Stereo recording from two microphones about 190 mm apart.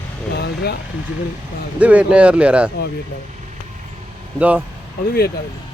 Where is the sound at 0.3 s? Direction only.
60° left (ahead or behind).